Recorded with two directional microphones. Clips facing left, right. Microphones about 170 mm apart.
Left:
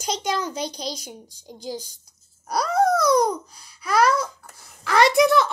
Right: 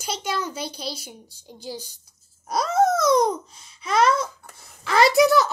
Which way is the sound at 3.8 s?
25° right (ahead or behind).